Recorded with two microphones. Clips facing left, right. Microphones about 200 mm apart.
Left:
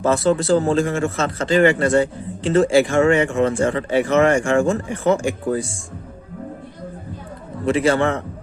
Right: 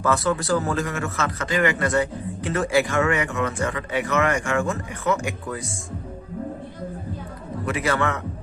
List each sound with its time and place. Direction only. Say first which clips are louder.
0.0 s a man's voice: left 5 dB; 25° left (ahead or behind)
7.6 s a man's voice: left 7 dB; 30° left (ahead or behind)